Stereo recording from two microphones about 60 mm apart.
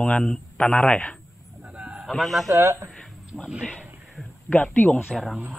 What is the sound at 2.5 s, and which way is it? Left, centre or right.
Speech, right.